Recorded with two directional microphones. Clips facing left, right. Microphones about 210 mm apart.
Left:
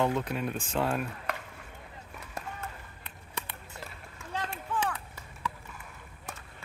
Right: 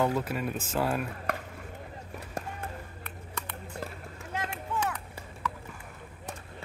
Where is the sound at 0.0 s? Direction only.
5° right (ahead or behind).